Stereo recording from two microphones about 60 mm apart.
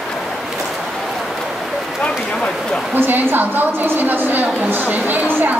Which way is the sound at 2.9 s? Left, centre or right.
Right.